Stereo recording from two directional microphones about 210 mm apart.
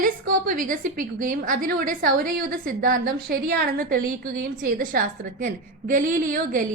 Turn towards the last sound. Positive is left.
turn(degrees=-40)  # may be behind; listen again after turning